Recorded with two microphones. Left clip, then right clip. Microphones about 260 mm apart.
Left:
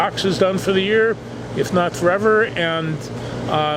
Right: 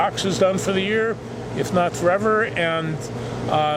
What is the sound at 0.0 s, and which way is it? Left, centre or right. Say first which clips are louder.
Speech: left 1 dB; left.